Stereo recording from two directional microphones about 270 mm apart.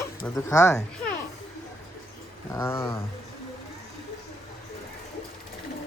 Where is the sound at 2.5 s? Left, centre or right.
Centre.